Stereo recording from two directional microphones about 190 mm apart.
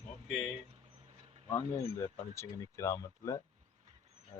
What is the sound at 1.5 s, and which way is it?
Speech, 15° left (ahead or behind).